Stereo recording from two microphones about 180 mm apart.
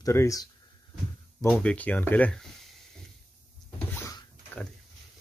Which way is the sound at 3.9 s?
20° left (ahead or behind).